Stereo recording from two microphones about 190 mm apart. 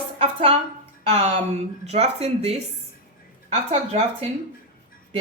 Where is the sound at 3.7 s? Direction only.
35° right (ahead or behind).